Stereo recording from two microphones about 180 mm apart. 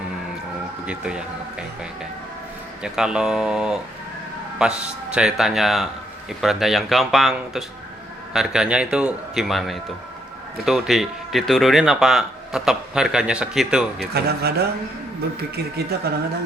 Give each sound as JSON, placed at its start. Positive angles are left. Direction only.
{"t": 0.9, "sound": "speech", "side_deg": -5}
{"t": 14.1, "sound": "speech", "side_deg": -60}